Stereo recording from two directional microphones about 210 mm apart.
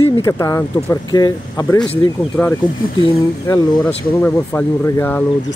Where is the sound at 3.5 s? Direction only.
20° left (ahead or behind).